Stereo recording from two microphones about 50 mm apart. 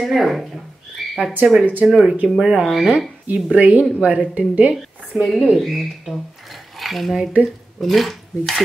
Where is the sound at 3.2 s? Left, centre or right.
Right.